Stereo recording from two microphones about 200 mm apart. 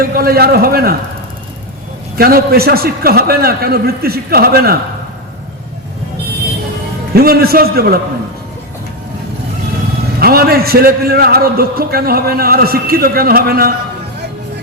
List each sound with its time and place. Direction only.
0.0 s a man's voice: 50° right (ahead or behind)
2.1 s a man's voice: 50° right (ahead or behind)
7.1 s a man's voice: 50° right (ahead or behind)
10.2 s a man's voice: 50° right (ahead or behind)